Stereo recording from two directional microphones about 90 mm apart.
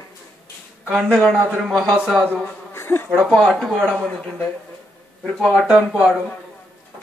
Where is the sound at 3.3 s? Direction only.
5° left (ahead or behind).